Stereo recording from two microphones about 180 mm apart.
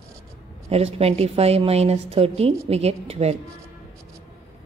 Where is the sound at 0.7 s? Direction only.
35° right (ahead or behind).